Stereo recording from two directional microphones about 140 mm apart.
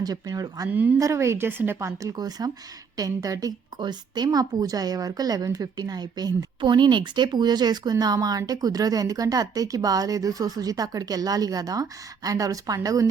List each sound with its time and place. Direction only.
0.0 s speech: 25° right (ahead or behind)